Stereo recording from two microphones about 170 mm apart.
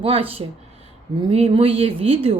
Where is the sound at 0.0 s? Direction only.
35° right (ahead or behind).